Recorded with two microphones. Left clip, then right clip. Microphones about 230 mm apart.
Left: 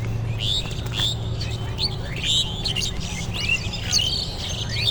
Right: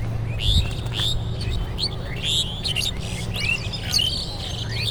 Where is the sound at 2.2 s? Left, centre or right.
Right.